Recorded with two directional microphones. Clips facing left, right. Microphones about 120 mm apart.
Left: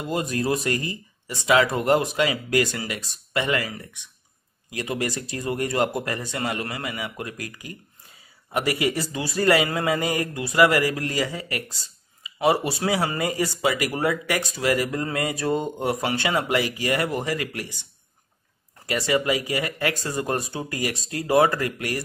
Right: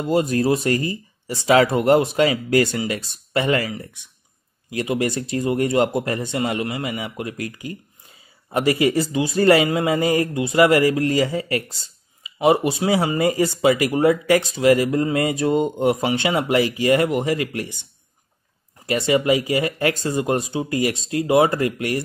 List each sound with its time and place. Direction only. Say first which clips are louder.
0.0 s speech: right 7 dB; 30° right (ahead or behind)
18.9 s speech: right 5 dB; 25° right (ahead or behind)